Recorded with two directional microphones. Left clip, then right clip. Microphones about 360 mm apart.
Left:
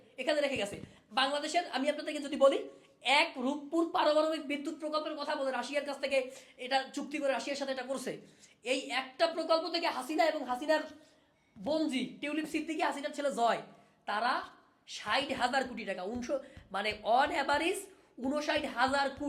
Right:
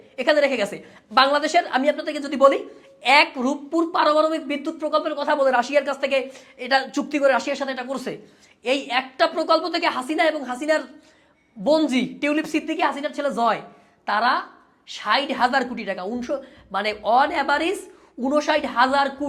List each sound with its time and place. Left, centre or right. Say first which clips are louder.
0.2 s speech: right 13 dB; right
1.1 s a woman's voice: right 14 dB; right
1.8 s a woman's voice: right 12 dB; centre
4.8 s speech: right 16 dB; right
6.0 s a woman's voice: right 10 dB; right
7.9 s a woman's voice: right 9 dB; centre
8.6 s a woman's voice: right 12 dB; right
11.6 s a woman's voice: right 14 dB; right; by 17.7 s centre
18.3 s a woman's voice: right 12 dB; right